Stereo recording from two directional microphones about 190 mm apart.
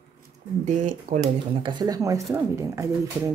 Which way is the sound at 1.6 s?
25° right (ahead or behind).